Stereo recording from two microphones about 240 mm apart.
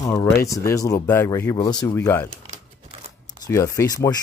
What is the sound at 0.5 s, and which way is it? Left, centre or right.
Speech, centre.